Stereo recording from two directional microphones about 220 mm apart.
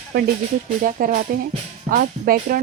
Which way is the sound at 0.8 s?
40° right (ahead or behind).